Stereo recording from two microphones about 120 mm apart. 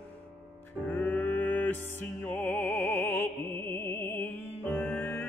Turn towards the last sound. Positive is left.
turn(degrees=15)  # may be behind; listen again after turning